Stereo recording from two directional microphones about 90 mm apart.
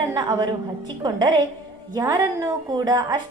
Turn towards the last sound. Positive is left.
turn(degrees=-50)  # may be behind; listen again after turning